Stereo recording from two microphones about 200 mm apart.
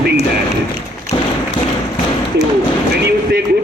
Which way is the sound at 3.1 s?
50° right (ahead or behind).